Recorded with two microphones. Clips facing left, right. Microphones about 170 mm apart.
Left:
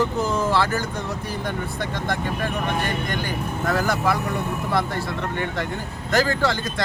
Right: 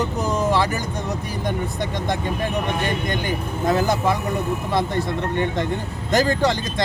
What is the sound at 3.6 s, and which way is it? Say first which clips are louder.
Speech: right 3 dB; 20° right (ahead or behind).